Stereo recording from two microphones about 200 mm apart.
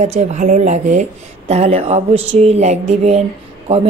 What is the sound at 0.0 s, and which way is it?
Speech, 35° right (ahead or behind).